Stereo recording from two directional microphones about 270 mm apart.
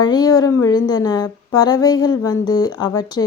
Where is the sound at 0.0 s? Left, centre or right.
Centre.